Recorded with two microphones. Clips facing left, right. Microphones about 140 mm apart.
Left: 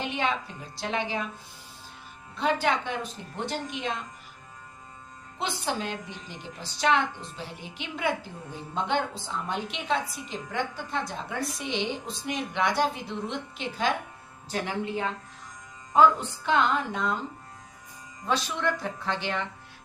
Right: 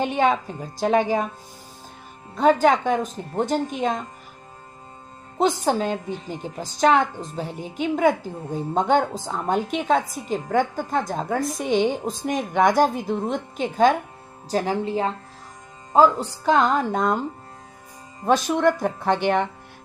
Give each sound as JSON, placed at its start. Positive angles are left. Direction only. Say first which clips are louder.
{"t": 0.0, "sound": "a woman's voice", "louder": "right 9 dB", "side_deg": -45}
{"t": 2.3, "sound": "a woman's voice", "louder": "right 9 dB", "side_deg": -45}
{"t": 5.4, "sound": "a woman's voice", "louder": "right 10 dB", "side_deg": -45}
{"t": 18.3, "sound": "a woman's voice", "louder": "right 9 dB", "side_deg": -45}